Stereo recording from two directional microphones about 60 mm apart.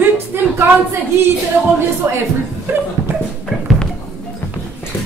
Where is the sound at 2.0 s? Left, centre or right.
Right.